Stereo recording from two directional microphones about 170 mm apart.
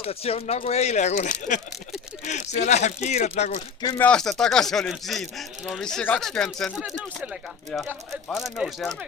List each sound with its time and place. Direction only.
0.0 s speech: 35° left (ahead or behind)
3.9 s speech: 5° left (ahead or behind)
8.3 s speech: 5° right (ahead or behind)